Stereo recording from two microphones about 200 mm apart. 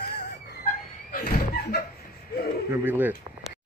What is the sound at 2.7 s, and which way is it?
Speech, 10° right (ahead or behind).